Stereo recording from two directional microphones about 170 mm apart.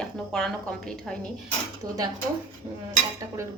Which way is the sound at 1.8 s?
20° right (ahead or behind).